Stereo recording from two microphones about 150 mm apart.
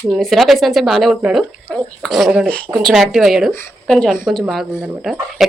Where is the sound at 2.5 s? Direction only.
5° left (ahead or behind).